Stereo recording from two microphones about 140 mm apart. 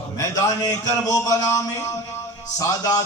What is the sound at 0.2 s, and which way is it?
A man's voice, 25° left (ahead or behind).